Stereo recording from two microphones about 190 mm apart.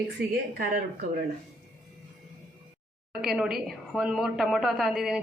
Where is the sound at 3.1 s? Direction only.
Centre (ahead or behind).